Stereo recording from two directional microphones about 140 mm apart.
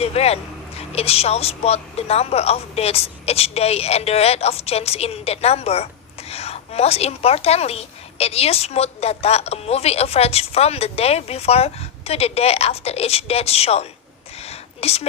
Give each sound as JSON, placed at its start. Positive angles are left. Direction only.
{"t": 0.0, "sound": "a woman's voice", "side_deg": 45}
{"t": 14.3, "sound": "whispering", "side_deg": 45}